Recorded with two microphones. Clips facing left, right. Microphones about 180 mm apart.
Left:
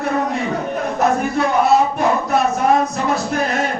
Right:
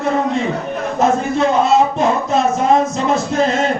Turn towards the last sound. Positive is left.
turn(degrees=-20)  # may be behind; listen again after turning